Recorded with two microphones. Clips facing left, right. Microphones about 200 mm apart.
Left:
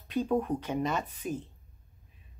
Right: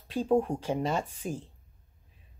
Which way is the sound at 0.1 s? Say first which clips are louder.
Right 2 dB; 30° right (ahead or behind).